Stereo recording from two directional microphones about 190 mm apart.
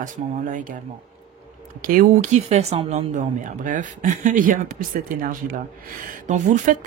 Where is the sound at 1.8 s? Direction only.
45° right (ahead or behind).